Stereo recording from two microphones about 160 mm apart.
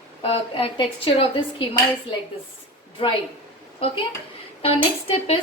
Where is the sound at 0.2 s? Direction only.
35° left (ahead or behind).